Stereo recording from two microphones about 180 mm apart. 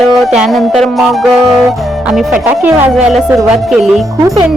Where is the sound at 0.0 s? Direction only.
Centre (ahead or behind).